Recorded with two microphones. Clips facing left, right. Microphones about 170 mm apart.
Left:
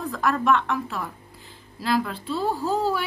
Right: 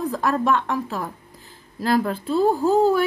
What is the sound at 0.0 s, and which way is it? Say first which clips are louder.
A woman's voice: right 2 dB; 35° right (ahead or behind).